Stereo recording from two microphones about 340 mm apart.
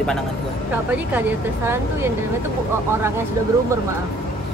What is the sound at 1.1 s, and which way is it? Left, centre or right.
Speech, centre.